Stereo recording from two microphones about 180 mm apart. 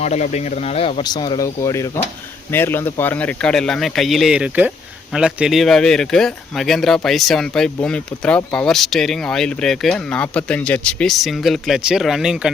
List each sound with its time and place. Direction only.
0.0 s speech: 40° left (ahead or behind); by 12.5 s 5° right (ahead or behind)